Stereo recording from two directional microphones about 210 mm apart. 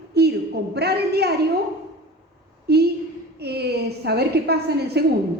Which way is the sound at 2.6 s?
50° right (ahead or behind).